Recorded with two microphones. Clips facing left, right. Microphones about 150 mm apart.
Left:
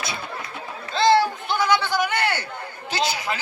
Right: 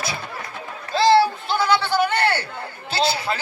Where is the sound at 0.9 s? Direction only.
20° left (ahead or behind).